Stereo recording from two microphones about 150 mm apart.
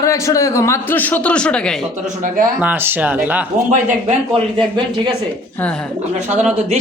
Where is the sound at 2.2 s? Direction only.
65° right (ahead or behind).